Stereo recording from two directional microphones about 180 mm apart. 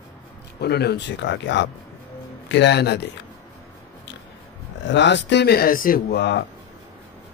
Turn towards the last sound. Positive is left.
turn(degrees=70)  # may be behind; listen again after turning